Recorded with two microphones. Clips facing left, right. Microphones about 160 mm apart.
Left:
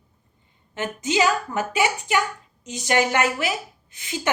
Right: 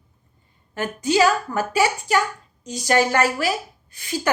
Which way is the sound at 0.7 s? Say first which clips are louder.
Right 3 dB; 20° left (ahead or behind).